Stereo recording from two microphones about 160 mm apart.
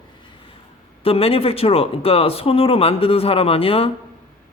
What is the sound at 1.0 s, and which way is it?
Speech, 35° left (ahead or behind).